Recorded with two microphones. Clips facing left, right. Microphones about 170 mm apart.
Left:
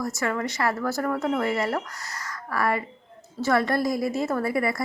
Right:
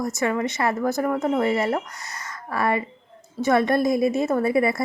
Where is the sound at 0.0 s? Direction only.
20° right (ahead or behind).